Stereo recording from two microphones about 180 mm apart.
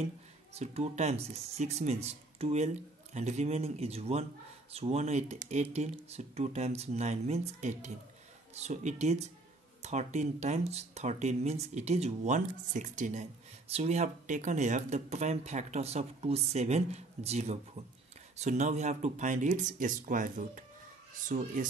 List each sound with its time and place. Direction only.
0.6 s speech: 35° right (ahead or behind)